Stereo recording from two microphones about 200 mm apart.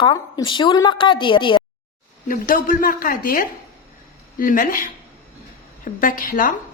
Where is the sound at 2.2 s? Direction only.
45° left (ahead or behind).